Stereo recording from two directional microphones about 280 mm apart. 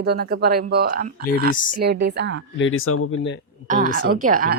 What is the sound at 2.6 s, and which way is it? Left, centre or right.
Speech, left.